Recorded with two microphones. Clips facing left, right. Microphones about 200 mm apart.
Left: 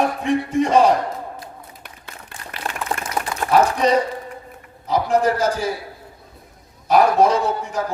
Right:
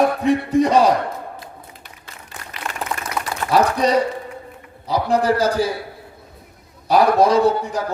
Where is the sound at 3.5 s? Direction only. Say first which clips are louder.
Even; 35° right (ahead or behind).